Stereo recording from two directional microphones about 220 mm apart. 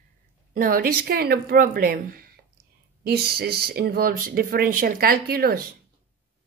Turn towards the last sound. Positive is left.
turn(degrees=-45)  # may be behind; listen again after turning